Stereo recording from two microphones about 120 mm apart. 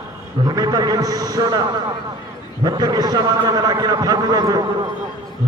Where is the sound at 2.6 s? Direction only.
35° right (ahead or behind).